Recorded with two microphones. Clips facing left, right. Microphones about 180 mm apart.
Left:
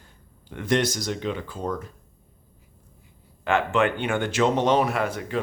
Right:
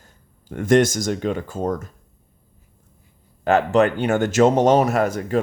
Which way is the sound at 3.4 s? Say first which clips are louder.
Right 6 dB; 40° right (ahead or behind).